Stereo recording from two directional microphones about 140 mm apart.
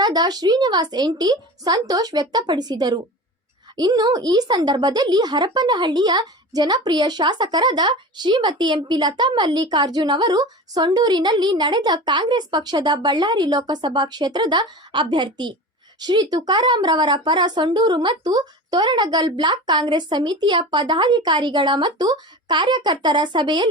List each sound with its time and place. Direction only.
0.0 s speech: 30° right (ahead or behind)